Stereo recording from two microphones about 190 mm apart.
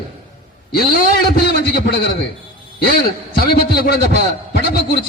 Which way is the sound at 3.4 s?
55° left (ahead or behind).